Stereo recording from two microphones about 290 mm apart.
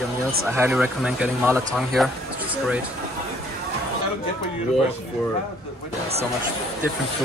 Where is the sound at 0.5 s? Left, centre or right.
Centre.